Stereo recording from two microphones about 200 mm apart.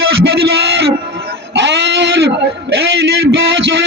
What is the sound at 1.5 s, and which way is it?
Goat, 60° right (ahead or behind).